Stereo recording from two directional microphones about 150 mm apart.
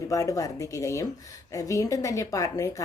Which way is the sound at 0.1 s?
20° left (ahead or behind).